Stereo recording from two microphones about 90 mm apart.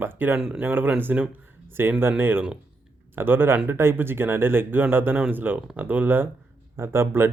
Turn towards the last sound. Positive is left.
turn(degrees=-25)  # may be behind; listen again after turning